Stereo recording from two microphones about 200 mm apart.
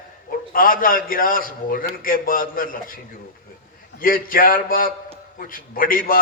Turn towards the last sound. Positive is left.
turn(degrees=45)  # may be behind; listen again after turning